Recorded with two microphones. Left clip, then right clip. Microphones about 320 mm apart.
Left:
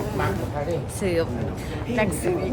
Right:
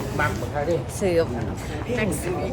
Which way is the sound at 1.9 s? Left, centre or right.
Left.